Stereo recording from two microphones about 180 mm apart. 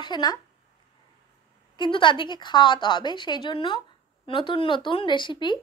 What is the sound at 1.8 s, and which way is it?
Speech, 25° left (ahead or behind).